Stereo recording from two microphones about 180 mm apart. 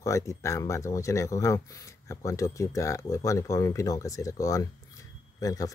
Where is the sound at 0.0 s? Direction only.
15° left (ahead or behind).